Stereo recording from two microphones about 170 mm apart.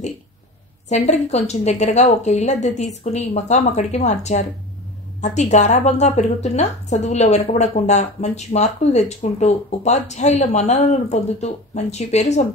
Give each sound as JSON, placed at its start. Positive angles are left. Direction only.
{"t": 0.8, "sound": "a woman's voice", "side_deg": 40}